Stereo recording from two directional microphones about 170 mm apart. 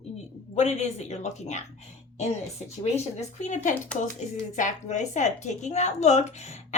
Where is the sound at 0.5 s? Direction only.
40° left (ahead or behind).